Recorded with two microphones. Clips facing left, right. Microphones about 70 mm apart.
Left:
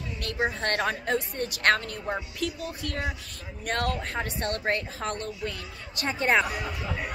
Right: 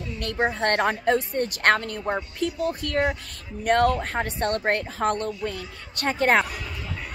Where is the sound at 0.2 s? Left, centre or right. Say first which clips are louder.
Right 4 dB; right.